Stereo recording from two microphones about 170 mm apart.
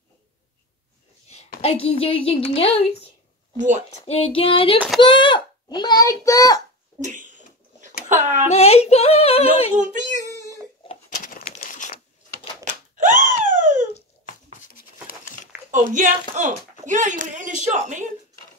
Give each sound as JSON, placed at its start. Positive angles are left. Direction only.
{"t": 1.6, "sound": "speech", "side_deg": 35}
{"t": 3.5, "sound": "speech", "side_deg": -45}
{"t": 4.0, "sound": "a child's voice", "side_deg": 35}
{"t": 7.0, "sound": "a sound", "side_deg": -50}
{"t": 8.1, "sound": "speech", "side_deg": -45}
{"t": 8.5, "sound": "speech", "side_deg": 40}
{"t": 9.8, "sound": "speech", "side_deg": -45}
{"t": 11.1, "sound": "bird", "side_deg": 55}
{"t": 11.6, "sound": "a sound", "side_deg": 50}
{"t": 12.6, "sound": "a sound", "side_deg": -45}
{"t": 14.7, "sound": "a sound", "side_deg": 55}
{"t": 15.7, "sound": "speech", "side_deg": -50}